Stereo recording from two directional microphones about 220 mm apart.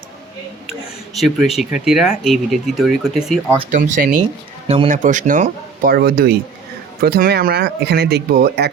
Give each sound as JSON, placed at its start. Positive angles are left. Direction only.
{"t": 1.1, "sound": "speech", "side_deg": 0}
{"t": 3.7, "sound": "speech", "side_deg": -35}